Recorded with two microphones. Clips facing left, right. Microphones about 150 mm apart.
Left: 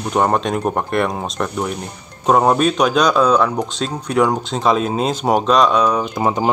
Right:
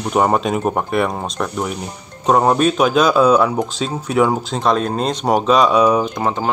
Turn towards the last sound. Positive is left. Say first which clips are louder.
# left 2 dB
turn(degrees=15)  # may be behind; listen again after turning